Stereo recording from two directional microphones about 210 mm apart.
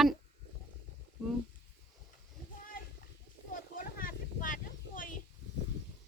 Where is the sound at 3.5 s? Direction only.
40° left (ahead or behind).